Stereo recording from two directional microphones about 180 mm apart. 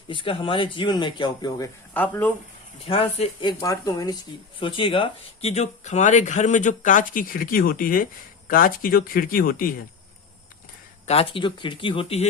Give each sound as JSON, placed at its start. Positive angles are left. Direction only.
{"t": 0.1, "sound": "speech", "side_deg": 30}
{"t": 2.8, "sound": "speech", "side_deg": 30}
{"t": 11.0, "sound": "speech", "side_deg": 35}